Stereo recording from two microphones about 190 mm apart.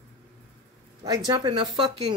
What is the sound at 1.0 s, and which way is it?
Speech, 20° right (ahead or behind).